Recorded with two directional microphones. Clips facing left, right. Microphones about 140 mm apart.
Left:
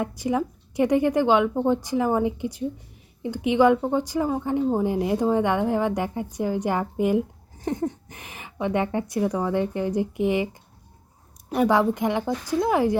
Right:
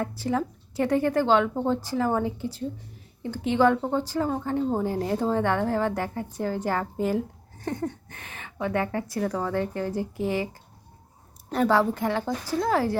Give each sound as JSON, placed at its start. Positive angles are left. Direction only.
{"t": 0.2, "sound": "speech", "side_deg": 15}